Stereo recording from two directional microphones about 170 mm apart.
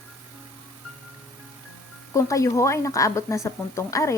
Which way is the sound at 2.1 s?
20° left (ahead or behind).